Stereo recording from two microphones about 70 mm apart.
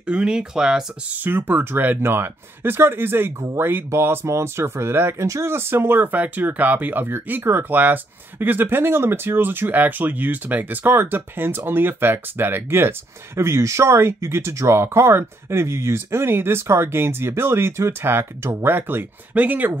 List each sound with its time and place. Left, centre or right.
0.0 s speech: centre
1.1 s speech: right